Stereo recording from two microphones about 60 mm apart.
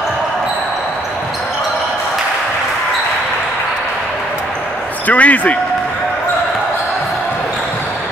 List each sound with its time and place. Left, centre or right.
5.0 s speech: left